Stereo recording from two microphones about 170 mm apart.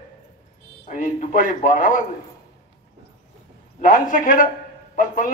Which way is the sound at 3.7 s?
50° left (ahead or behind).